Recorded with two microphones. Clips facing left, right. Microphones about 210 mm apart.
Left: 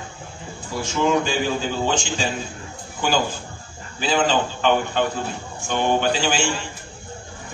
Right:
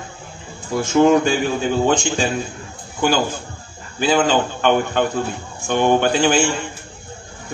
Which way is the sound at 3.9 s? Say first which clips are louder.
Right 4 dB; 55° right (ahead or behind).